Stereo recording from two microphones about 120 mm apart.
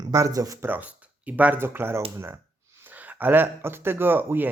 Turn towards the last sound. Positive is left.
turn(degrees=-15)  # may be behind; listen again after turning